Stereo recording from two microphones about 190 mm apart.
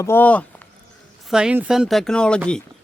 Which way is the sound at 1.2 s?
5° right (ahead or behind).